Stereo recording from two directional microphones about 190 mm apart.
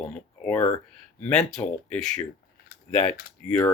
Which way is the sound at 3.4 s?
5° left (ahead or behind).